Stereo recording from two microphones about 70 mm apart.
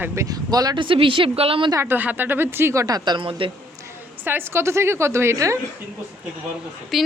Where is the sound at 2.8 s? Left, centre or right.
Right.